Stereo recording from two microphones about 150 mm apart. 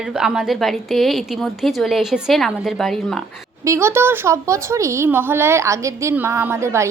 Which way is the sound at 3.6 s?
20° right (ahead or behind).